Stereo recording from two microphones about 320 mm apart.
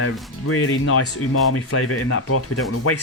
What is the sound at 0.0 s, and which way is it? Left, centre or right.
Speech, left.